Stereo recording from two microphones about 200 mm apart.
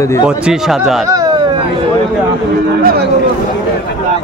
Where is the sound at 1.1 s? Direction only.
15° right (ahead or behind).